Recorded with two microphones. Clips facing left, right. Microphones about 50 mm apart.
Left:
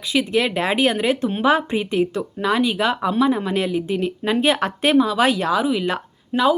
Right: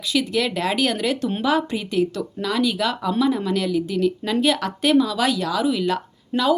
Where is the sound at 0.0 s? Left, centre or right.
Left.